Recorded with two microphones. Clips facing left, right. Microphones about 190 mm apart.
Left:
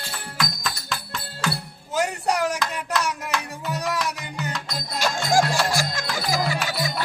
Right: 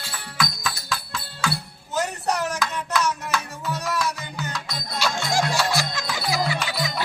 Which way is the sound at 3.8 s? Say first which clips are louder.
Even; 15° left (ahead or behind).